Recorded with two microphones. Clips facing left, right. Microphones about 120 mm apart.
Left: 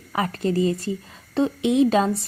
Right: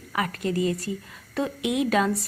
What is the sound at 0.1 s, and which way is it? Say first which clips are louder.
A woman's voice: left 4 dB; 30° left (ahead or behind).